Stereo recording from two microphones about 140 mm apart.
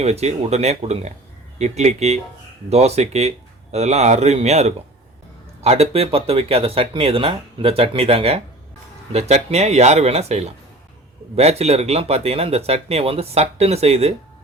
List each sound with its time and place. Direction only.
0.0 s speech: 50° right (ahead or behind)